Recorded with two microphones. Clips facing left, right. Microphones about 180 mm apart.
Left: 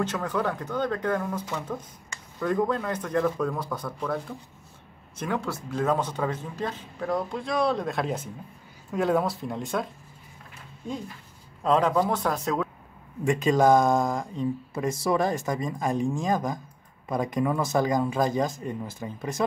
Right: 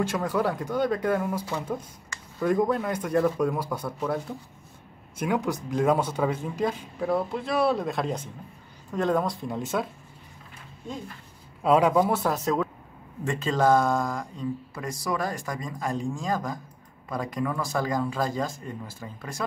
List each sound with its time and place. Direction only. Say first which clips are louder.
0.0 s speech: right 2 dB; 10° right (ahead or behind)
11.6 s speech: right 2 dB; 10° right (ahead or behind)
13.2 s speech: left 3 dB; 15° left (ahead or behind)